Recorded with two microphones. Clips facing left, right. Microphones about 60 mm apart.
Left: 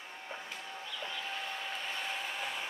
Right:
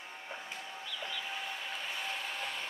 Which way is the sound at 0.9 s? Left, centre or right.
Centre.